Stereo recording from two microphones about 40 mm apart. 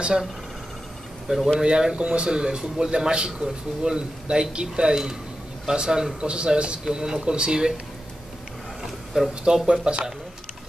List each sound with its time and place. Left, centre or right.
1.3 s a man's voice: centre
1.6 s a man's voice: centre
8.8 s a sound: centre
9.7 s speech: right